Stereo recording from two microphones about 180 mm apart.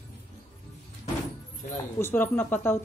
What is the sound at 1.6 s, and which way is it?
Music, 45° left (ahead or behind).